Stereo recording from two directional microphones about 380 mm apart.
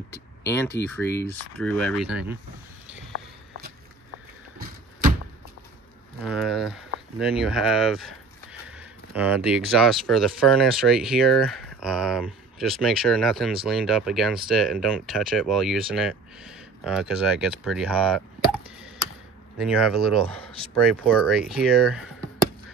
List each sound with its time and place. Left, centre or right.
0.1 s speech: centre
4.6 s a sound: right
6.2 s speech: centre
8.6 s a sound: centre
9.8 s speech: centre
19.6 s speech: centre
20.9 s speech: centre